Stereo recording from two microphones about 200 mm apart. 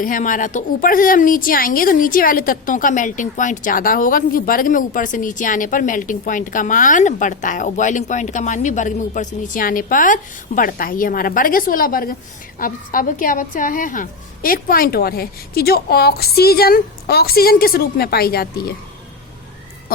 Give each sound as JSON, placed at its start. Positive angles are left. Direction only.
{"t": 0.0, "sound": "a woman's voice", "side_deg": 40}